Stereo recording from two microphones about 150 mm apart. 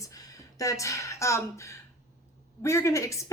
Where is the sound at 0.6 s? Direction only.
20° left (ahead or behind).